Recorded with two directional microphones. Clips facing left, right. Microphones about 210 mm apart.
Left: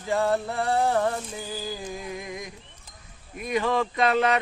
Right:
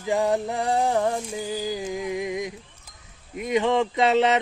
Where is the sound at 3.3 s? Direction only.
20° right (ahead or behind).